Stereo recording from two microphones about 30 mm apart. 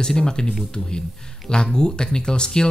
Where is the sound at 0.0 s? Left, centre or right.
Left.